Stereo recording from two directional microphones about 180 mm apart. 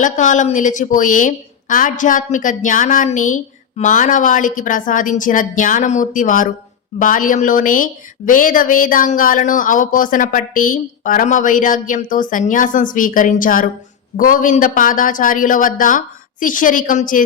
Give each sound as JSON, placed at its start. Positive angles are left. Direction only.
{"t": 0.0, "sound": "a woman's voice", "side_deg": 45}